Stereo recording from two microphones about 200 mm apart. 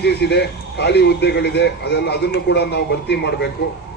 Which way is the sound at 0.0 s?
55° left (ahead or behind).